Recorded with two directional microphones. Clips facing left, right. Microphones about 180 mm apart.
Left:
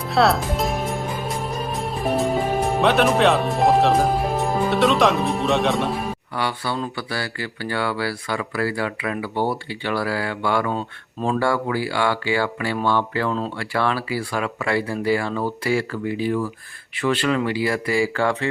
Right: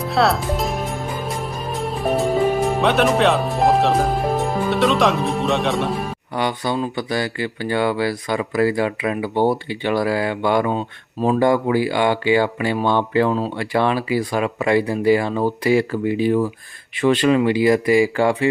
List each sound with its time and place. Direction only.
0.0 s music: centre (ahead or behind)
2.6 s speech: centre (ahead or behind)
6.3 s speech: 20° right (ahead or behind)